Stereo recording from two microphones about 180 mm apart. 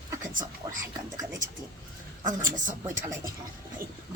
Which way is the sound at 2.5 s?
45° right (ahead or behind).